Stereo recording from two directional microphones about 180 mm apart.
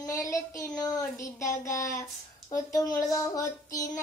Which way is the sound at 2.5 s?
20° left (ahead or behind).